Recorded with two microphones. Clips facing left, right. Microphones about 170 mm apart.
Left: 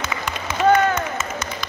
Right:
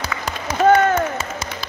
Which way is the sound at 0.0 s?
35° right (ahead or behind).